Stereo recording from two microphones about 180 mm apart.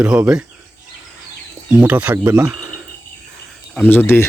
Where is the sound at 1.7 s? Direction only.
10° right (ahead or behind).